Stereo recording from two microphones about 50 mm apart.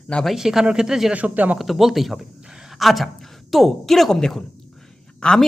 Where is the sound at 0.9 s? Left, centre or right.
Centre.